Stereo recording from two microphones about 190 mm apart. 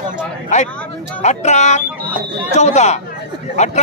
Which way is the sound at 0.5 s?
40° left (ahead or behind).